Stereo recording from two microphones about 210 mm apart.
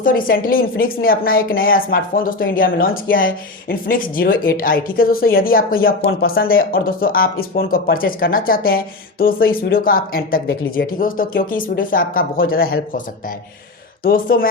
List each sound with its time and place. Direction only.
0.0 s speech: 40° left (ahead or behind)
14.0 s speech: 45° left (ahead or behind)